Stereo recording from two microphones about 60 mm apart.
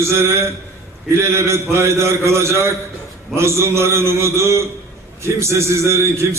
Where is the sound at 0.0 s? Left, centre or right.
Right.